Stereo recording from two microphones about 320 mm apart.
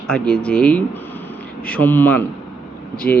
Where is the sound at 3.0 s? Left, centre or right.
Left.